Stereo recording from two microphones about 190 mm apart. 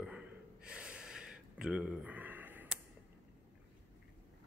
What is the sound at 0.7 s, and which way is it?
Gasp, 5° right (ahead or behind).